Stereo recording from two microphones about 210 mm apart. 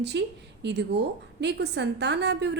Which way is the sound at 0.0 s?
55° right (ahead or behind).